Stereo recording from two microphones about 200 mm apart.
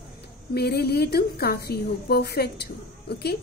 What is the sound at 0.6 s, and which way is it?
A woman's voice, 55° left (ahead or behind).